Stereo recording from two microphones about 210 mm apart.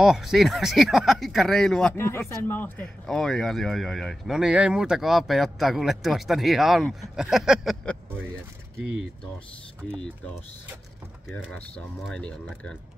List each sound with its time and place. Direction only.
0.0 s speech: centre (ahead or behind)
9.8 s speech: 5° left (ahead or behind)